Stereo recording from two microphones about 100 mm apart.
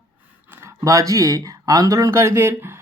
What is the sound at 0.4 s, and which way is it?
Speech, 25° right (ahead or behind).